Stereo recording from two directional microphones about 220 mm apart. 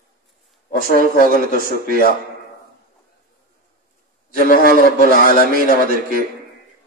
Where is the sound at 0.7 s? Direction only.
40° left (ahead or behind).